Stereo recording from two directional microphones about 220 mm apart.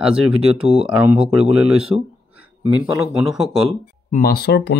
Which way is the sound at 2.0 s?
5° right (ahead or behind).